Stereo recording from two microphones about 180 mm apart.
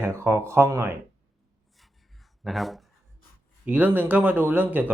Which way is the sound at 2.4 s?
Centre (ahead or behind).